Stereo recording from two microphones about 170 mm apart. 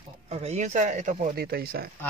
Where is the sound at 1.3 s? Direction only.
65° right (ahead or behind).